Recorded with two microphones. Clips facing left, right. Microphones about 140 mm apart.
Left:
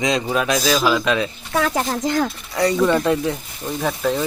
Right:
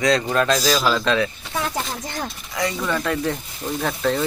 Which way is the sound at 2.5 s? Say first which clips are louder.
Left 6 dB; 35° left (ahead or behind).